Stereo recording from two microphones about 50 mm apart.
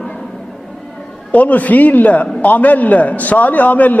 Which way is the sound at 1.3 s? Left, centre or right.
Left.